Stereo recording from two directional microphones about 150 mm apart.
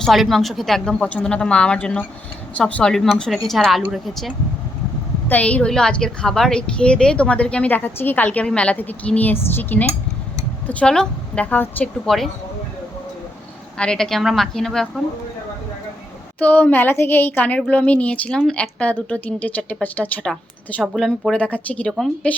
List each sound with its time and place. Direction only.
0.0 s a woman's voice: centre (ahead or behind)
5.3 s a woman's voice: 10° left (ahead or behind)
13.7 s a woman's voice: 5° left (ahead or behind)
16.4 s a woman's voice: 10° left (ahead or behind)